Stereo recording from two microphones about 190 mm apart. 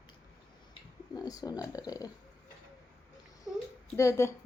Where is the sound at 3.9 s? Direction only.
15° left (ahead or behind).